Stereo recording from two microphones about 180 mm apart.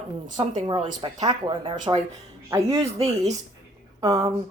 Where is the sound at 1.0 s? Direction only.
25° right (ahead or behind).